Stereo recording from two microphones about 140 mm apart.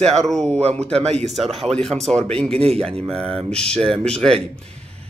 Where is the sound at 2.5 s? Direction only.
45° right (ahead or behind).